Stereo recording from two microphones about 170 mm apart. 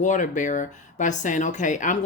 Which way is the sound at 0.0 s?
45° left (ahead or behind).